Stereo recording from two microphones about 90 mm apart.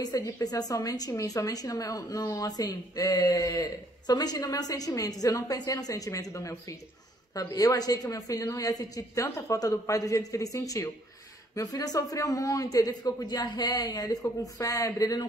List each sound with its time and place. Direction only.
0.4 s a woman's voice: 45° left (ahead or behind)